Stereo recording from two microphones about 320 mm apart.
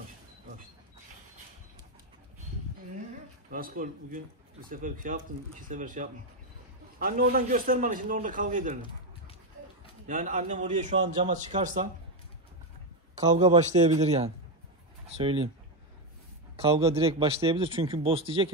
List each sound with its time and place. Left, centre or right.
3.4 s a man's voice: right
10.0 s a man's voice: right
13.2 s a man's voice: centre
16.5 s speech: centre